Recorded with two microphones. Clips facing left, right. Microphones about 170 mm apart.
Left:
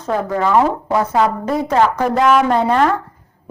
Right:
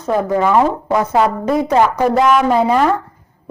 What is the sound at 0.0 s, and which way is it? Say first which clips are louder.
A woman's voice: right 3 dB; 15° right (ahead or behind).